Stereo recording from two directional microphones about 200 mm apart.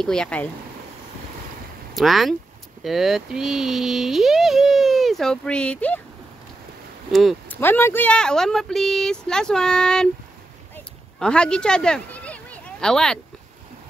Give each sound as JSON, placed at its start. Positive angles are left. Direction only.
{"t": 0.0, "sound": "speech", "side_deg": 5}
{"t": 2.0, "sound": "speech", "side_deg": 0}
{"t": 7.1, "sound": "speech", "side_deg": 0}
{"t": 7.6, "sound": "speech", "side_deg": 10}
{"t": 11.1, "sound": "speech", "side_deg": 5}